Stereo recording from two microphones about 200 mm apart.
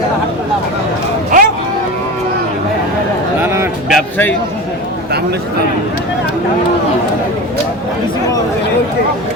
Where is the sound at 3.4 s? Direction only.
15° right (ahead or behind).